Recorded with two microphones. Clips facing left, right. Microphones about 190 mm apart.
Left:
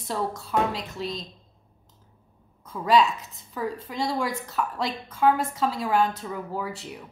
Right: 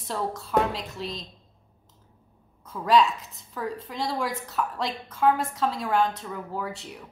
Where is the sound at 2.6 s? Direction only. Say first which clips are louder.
Even; centre (ahead or behind).